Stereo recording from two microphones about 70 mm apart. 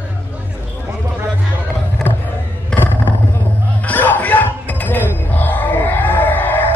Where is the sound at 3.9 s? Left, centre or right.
Left.